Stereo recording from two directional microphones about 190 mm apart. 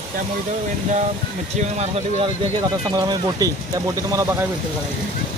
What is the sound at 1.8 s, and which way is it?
Speech, 25° right (ahead or behind).